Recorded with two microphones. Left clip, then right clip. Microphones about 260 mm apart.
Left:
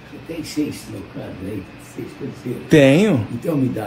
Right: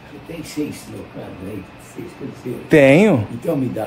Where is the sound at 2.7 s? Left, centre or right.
Right.